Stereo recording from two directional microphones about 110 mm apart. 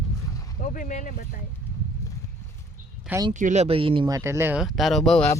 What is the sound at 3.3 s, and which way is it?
Speech, 90° right.